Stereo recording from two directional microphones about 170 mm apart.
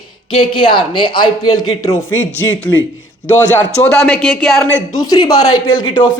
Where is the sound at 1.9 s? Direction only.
15° left (ahead or behind).